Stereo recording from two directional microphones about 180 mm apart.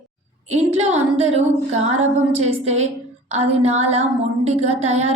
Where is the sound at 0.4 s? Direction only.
35° right (ahead or behind).